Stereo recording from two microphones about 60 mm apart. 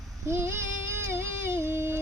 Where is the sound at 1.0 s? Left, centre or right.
Right.